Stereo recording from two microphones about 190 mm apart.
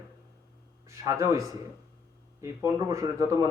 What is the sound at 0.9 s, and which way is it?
Speech, 15° right (ahead or behind).